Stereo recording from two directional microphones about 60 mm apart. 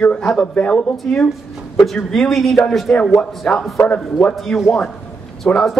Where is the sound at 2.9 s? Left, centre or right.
Centre.